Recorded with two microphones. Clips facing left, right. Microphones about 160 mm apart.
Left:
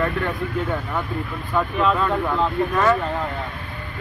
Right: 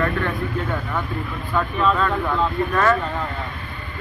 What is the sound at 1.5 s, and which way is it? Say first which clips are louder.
Speech: even; 10° left (ahead or behind).